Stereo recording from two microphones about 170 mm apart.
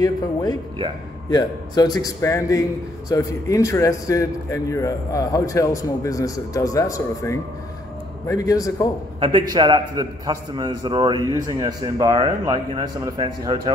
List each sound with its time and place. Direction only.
0.0 s a man's voice: 25° left (ahead or behind)
9.2 s a man's voice: 25° right (ahead or behind)